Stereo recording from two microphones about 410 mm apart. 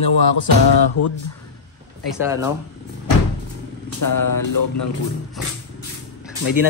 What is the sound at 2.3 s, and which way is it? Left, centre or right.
Speech, centre.